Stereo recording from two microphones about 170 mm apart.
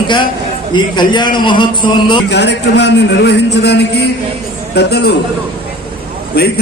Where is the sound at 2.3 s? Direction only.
90° left.